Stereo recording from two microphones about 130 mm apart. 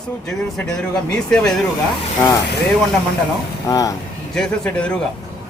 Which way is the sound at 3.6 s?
25° left (ahead or behind).